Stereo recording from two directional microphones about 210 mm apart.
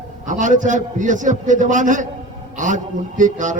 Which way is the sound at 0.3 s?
35° right (ahead or behind).